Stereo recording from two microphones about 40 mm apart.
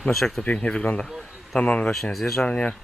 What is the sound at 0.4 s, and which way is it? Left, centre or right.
Speech, left.